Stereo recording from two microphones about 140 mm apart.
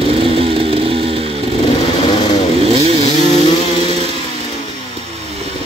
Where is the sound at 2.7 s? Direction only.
45° right (ahead or behind).